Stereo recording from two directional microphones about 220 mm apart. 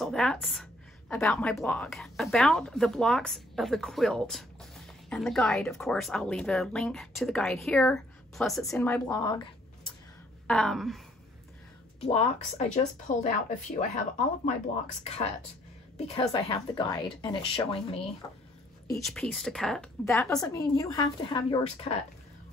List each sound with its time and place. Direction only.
0.0 s a woman's voice: centre (ahead or behind)
10.4 s a woman's voice: 5° left (ahead or behind)
12.0 s speech: 30° left (ahead or behind)
16.1 s a woman's voice: 25° left (ahead or behind)
18.9 s a woman's voice: centre (ahead or behind)
20.3 s a woman's voice: 15° left (ahead or behind)